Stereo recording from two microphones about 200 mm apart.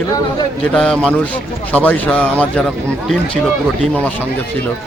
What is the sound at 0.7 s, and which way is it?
A man's voice, 5° left (ahead or behind).